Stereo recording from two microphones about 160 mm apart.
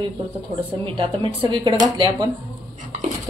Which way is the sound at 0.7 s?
35° right (ahead or behind).